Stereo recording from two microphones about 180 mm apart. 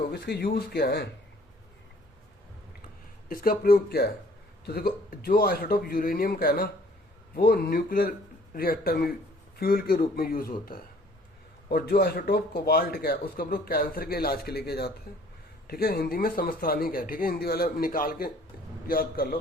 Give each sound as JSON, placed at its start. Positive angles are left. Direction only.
{"t": 0.1, "sound": "speech", "side_deg": 65}
{"t": 3.2, "sound": "speech", "side_deg": 55}